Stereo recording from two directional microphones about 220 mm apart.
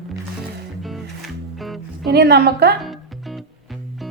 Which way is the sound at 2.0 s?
50° right (ahead or behind).